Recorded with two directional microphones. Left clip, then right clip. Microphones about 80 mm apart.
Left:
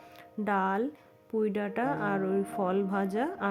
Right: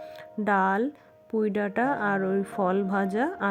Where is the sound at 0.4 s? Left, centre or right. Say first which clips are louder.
Right 5 dB; right.